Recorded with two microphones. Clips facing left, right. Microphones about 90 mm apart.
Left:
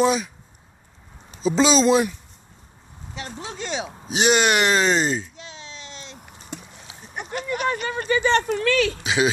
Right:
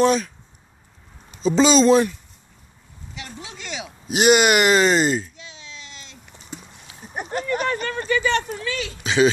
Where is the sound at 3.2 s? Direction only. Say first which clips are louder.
Left 5 dB; 30° left (ahead or behind).